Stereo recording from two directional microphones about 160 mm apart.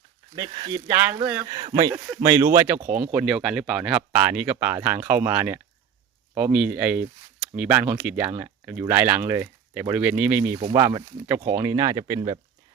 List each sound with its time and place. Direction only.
0.3 s speech: 25° right (ahead or behind)
1.2 s speech: 10° right (ahead or behind)
1.5 s speech: 25° right (ahead or behind)
10.7 s speech: 20° right (ahead or behind)